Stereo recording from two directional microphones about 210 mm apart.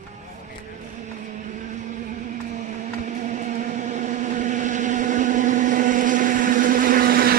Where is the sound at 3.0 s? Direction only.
35° right (ahead or behind).